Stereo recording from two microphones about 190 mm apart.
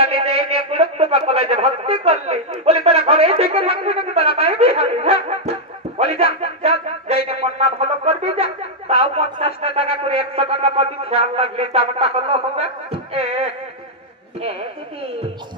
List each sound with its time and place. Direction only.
0.1 s a man's voice: 30° right (ahead or behind)
4.4 s music: 35° right (ahead or behind)
6.0 s a sound: 35° right (ahead or behind)
9.6 s speech: 30° right (ahead or behind)